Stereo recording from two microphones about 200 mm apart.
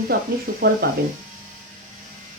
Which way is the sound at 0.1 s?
50° right (ahead or behind).